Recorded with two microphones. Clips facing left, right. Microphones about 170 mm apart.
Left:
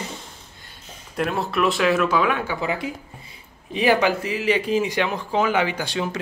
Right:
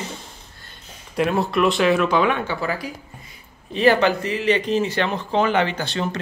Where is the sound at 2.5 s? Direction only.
20° left (ahead or behind).